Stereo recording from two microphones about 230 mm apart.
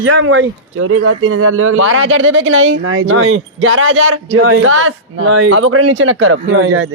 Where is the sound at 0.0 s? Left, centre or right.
Right.